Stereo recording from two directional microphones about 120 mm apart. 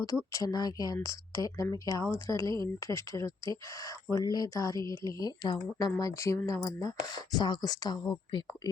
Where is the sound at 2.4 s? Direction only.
40° right (ahead or behind).